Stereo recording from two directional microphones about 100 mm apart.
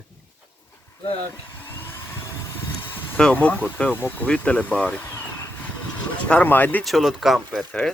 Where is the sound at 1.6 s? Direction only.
20° left (ahead or behind).